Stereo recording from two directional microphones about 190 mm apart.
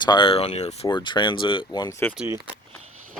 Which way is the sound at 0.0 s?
25° left (ahead or behind).